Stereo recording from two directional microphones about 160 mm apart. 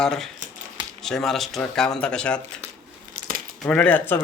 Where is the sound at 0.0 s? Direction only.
5° left (ahead or behind).